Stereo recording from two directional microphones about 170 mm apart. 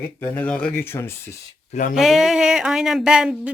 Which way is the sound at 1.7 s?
55° left (ahead or behind).